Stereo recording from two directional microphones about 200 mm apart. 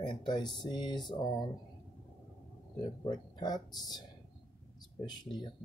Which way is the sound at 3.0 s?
20° left (ahead or behind).